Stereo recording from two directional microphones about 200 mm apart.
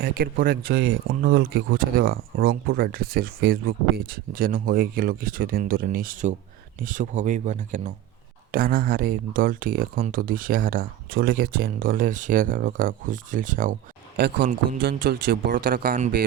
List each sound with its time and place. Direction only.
0.0 s speech: 50° right (ahead or behind)
14.2 s speech: 55° right (ahead or behind); by 16.2 s 40° right (ahead or behind)